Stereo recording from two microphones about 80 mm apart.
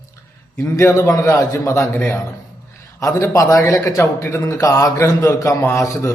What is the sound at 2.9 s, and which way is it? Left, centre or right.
A man's voice, left.